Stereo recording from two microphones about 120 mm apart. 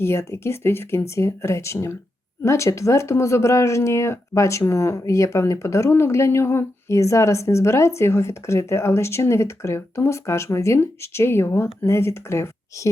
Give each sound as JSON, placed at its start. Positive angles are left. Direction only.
{"t": 0.0, "sound": "speech", "side_deg": 20}